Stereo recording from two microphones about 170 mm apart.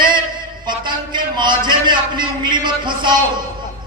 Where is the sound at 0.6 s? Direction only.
25° right (ahead or behind).